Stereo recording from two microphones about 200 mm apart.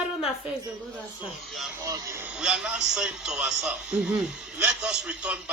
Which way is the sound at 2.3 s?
5° right (ahead or behind).